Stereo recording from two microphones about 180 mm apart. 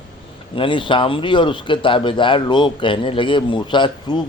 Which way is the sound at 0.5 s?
30° left (ahead or behind).